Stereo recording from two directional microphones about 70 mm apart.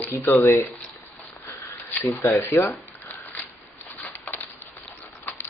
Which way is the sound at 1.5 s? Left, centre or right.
Left.